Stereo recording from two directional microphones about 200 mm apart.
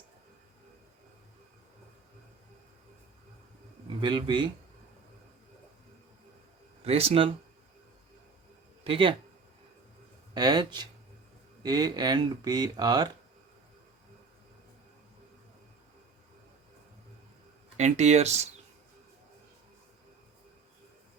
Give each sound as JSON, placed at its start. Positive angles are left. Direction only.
{"t": 4.0, "sound": "speech", "side_deg": -25}
{"t": 6.8, "sound": "speech", "side_deg": -30}
{"t": 8.8, "sound": "speech", "side_deg": -25}
{"t": 10.3, "sound": "speech", "side_deg": -20}
{"t": 17.7, "sound": "speech", "side_deg": -35}